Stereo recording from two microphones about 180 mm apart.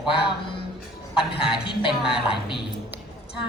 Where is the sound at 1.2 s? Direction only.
30° left (ahead or behind).